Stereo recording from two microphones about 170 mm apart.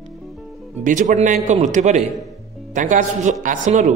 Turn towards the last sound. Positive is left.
turn(degrees=-45)  # may be behind; listen again after turning